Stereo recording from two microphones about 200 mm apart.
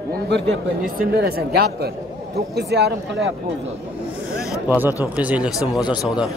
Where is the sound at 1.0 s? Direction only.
50° right (ahead or behind).